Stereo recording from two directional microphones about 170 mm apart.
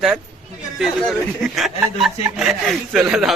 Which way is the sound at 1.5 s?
Centre (ahead or behind).